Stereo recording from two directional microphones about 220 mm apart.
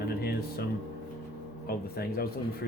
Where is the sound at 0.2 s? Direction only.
45° left (ahead or behind).